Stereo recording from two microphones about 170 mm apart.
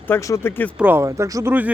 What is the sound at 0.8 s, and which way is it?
Speech, 15° right (ahead or behind).